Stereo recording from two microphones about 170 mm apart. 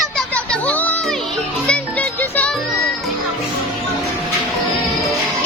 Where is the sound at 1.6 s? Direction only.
5° left (ahead or behind).